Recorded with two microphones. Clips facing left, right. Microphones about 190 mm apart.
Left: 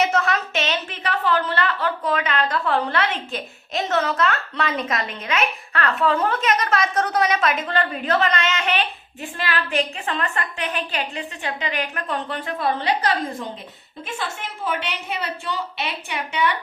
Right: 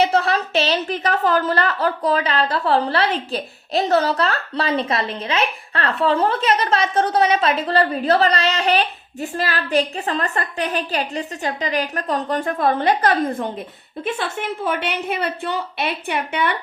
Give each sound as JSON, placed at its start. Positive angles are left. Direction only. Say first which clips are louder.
{"t": 0.0, "sound": "a woman's voice", "louder": "right 3 dB", "side_deg": -30}